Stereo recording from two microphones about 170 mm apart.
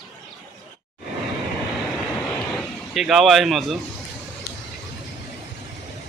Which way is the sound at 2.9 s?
Centre (ahead or behind).